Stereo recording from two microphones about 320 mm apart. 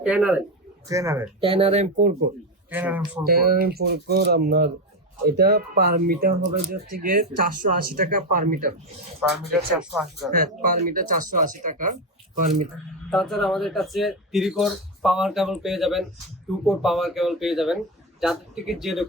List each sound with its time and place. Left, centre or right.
0.0 s speech: centre; by 2.1 s right
2.6 s speech: centre
3.2 s speech: right
9.2 s speech: centre
10.3 s speech: right
13.1 s speech: centre